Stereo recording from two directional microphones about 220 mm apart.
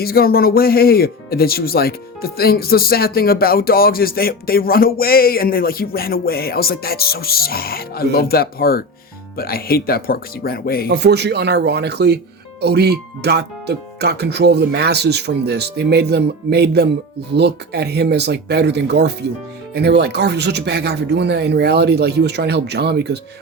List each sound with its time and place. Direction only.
0.0 s speech: 45° left (ahead or behind)
10.9 s speech: 50° right (ahead or behind)